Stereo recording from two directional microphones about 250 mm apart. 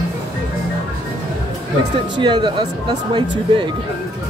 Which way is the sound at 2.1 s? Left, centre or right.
Centre.